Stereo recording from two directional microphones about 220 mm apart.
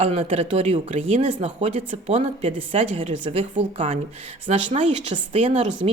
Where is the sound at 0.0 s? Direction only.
30° right (ahead or behind).